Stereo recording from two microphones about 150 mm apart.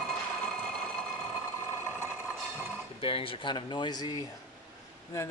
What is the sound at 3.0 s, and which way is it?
A man's voice, 35° left (ahead or behind).